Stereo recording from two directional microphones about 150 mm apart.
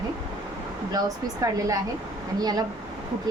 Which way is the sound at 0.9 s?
20° right (ahead or behind).